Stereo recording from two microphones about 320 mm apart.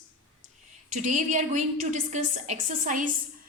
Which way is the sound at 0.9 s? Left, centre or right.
Right.